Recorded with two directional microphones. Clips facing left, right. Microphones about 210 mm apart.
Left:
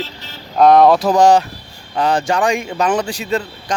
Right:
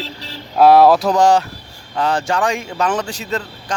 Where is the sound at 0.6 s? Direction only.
5° right (ahead or behind).